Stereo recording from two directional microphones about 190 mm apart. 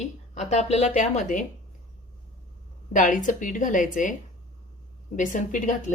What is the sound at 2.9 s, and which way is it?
Speech, 45° left (ahead or behind).